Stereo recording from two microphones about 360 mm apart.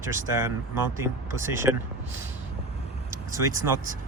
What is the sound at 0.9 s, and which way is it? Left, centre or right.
Speech, centre.